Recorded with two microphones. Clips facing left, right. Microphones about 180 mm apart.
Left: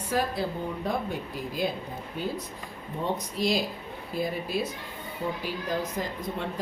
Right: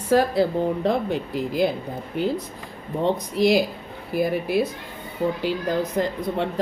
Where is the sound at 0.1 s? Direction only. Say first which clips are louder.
Right 10 dB; 80° right.